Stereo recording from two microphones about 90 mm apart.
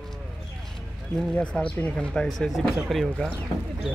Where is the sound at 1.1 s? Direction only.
10° left (ahead or behind).